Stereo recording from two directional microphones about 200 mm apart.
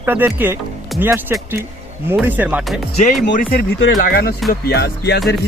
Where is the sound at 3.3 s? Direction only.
45° left (ahead or behind).